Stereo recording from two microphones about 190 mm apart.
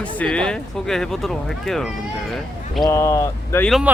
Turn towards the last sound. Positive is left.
turn(degrees=0)  # may be behind; listen again after turning